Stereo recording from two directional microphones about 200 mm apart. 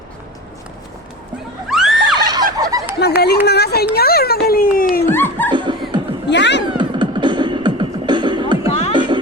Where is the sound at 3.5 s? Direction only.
55° left (ahead or behind).